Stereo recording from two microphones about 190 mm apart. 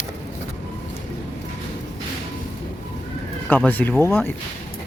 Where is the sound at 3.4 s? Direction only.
10° left (ahead or behind).